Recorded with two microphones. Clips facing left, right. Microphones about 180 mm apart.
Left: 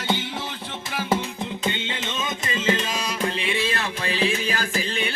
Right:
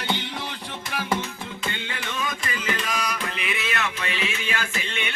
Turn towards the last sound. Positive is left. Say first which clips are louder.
# left 5 dB
turn(degrees=35)  # may be behind; listen again after turning